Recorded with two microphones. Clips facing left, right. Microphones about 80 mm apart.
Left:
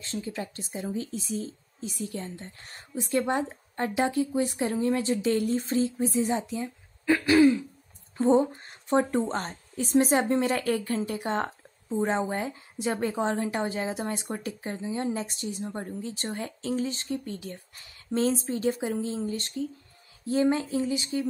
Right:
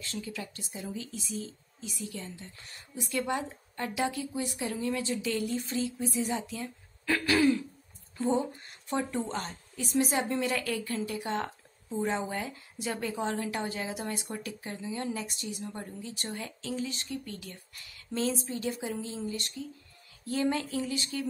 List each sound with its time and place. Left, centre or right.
0.0 s a woman's voice: left
8.2 s a woman's voice: left
20.2 s speech: left